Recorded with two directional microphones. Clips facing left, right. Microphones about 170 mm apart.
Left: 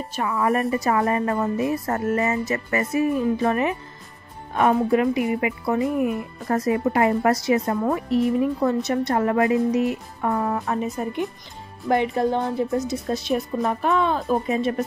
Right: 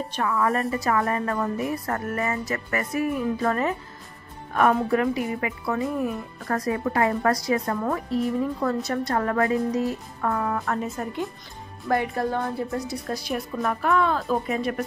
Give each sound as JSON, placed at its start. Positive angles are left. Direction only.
{"t": 0.3, "sound": "a woman's voice", "side_deg": 20}
{"t": 5.2, "sound": "speech", "side_deg": 15}
{"t": 6.5, "sound": "a woman's voice", "side_deg": 20}